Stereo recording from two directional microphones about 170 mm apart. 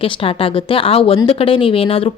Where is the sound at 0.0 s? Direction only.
30° left (ahead or behind).